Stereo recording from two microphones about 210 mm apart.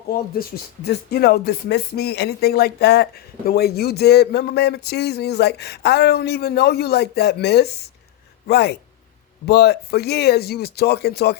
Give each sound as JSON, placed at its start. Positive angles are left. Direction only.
{"t": 0.1, "sound": "speech", "side_deg": 45}